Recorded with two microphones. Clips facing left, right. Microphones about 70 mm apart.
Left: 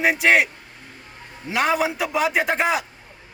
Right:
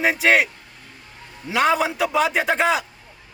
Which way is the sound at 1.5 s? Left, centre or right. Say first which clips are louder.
Right 2 dB; centre.